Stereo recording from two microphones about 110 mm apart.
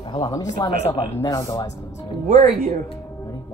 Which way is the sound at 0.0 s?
50° left (ahead or behind).